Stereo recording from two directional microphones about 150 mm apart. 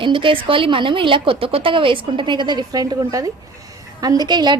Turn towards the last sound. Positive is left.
turn(degrees=-30)  # may be behind; listen again after turning